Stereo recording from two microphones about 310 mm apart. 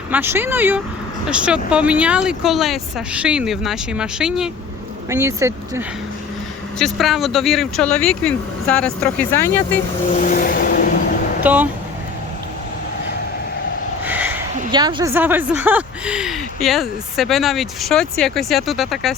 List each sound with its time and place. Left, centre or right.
0.1 s speech: centre
10.1 s vehicle: left
11.4 s speech: centre
14.0 s a sound: centre
14.5 s speech: centre